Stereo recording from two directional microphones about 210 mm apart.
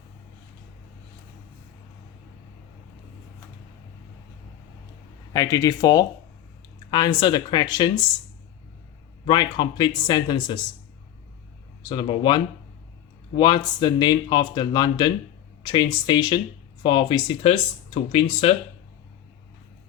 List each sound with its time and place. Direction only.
5.3 s speech: 15° left (ahead or behind)
9.2 s speech: 20° left (ahead or behind)
11.9 s speech: 20° left (ahead or behind)